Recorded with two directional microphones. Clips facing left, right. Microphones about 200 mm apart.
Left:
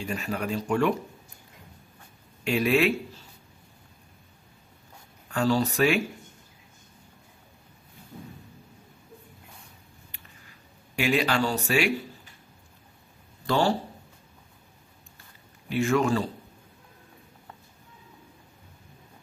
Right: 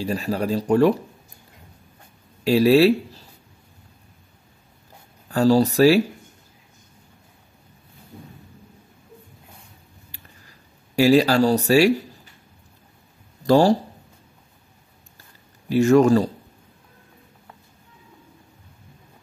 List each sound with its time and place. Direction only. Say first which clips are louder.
0.0 s speech: right 7 dB; 35° right (ahead or behind)
2.4 s a man's voice: right 8 dB; 35° right (ahead or behind)
5.3 s speech: right 8 dB; 35° right (ahead or behind)
11.0 s speech: right 9 dB; 35° right (ahead or behind)
13.5 s speech: right 9 dB; 40° right (ahead or behind)
15.7 s speech: right 9 dB; 40° right (ahead or behind)